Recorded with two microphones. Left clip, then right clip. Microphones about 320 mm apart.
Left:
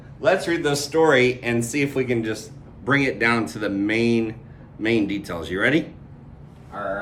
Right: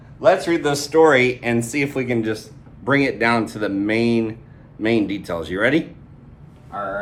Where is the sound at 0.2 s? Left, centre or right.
Centre.